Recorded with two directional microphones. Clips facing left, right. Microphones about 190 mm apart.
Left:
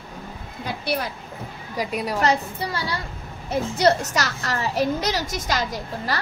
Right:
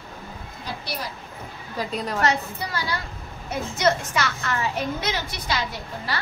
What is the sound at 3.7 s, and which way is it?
A woman's voice, 35° left (ahead or behind).